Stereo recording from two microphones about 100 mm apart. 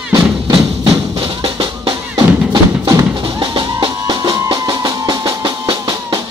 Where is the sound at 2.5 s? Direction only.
35° right (ahead or behind).